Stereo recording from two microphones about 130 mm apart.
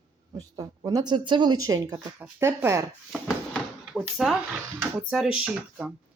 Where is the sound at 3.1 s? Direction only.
Centre (ahead or behind).